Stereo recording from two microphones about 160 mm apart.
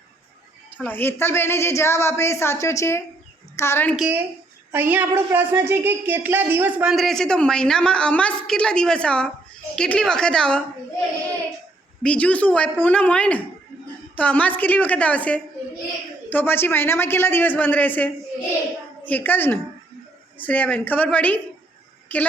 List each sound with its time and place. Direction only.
0.7 s a woman's voice: 10° left (ahead or behind)
3.9 s a woman's voice: 5° right (ahead or behind)
6.9 s a woman's voice: centre (ahead or behind)
12.0 s a woman's voice: 10° left (ahead or behind)